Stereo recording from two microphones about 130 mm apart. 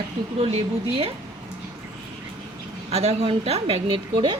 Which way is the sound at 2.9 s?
55° right (ahead or behind).